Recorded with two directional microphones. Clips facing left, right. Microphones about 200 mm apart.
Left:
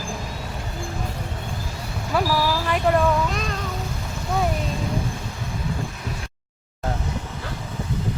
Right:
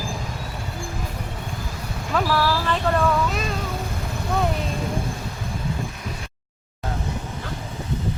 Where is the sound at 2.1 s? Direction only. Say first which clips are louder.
Even; 10° left (ahead or behind).